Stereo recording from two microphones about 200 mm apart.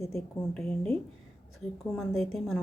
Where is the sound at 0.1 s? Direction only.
5° left (ahead or behind).